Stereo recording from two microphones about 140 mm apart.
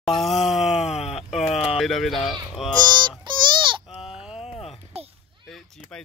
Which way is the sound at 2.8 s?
30° right (ahead or behind).